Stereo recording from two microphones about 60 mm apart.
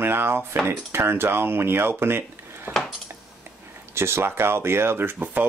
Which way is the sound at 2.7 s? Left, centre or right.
Right.